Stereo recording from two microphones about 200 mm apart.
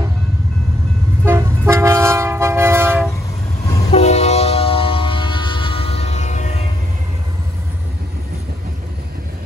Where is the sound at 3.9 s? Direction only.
35° left (ahead or behind).